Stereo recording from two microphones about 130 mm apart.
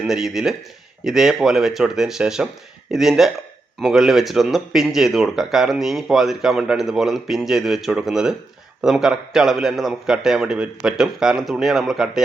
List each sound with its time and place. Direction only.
0.0 s speech: 5° right (ahead or behind)